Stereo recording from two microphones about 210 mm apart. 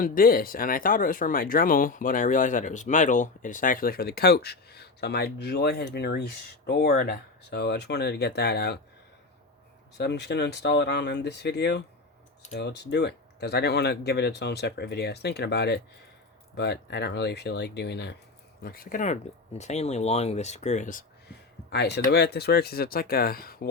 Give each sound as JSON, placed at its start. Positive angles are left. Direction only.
{"t": 0.0, "sound": "speech", "side_deg": 45}
{"t": 10.0, "sound": "speech", "side_deg": 55}
{"t": 21.7, "sound": "speech", "side_deg": 55}